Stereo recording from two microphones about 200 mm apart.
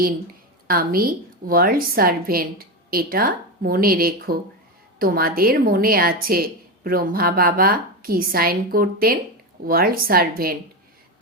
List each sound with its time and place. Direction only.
0.7 s a woman's voice: 50° right (ahead or behind)